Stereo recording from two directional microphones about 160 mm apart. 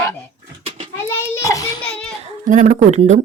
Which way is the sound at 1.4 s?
20° left (ahead or behind).